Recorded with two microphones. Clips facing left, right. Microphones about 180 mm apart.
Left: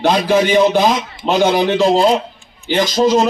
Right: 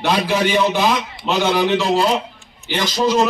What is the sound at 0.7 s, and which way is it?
Speech, 45° left (ahead or behind).